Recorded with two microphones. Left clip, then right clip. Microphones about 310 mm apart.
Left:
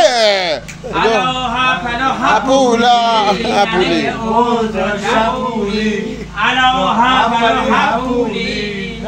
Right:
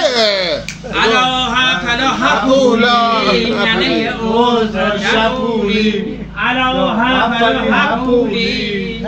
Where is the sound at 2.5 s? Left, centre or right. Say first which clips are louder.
Even; left.